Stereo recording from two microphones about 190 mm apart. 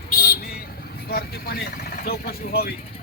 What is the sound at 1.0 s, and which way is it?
Speech, 55° left (ahead or behind).